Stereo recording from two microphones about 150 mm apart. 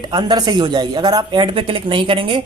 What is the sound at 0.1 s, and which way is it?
Speech, 25° right (ahead or behind).